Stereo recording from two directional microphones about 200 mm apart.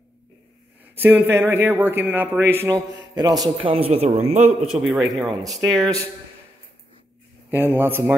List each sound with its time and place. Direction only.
0.9 s a man's voice: 10° right (ahead or behind)
3.7 s speech: 30° right (ahead or behind)
4.4 s a man's voice: centre (ahead or behind)
5.0 s a man's voice: 20° right (ahead or behind)
7.5 s a man's voice: 10° right (ahead or behind)